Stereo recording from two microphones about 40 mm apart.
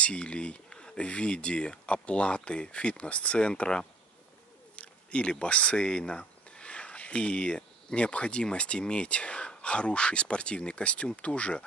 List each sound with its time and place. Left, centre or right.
0.0 s speech: left
4.7 s speech: left